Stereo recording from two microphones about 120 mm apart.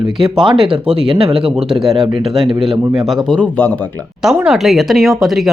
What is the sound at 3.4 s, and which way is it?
Speech, 15° left (ahead or behind).